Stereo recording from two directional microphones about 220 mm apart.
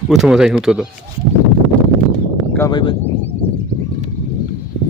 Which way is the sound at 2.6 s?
20° left (ahead or behind).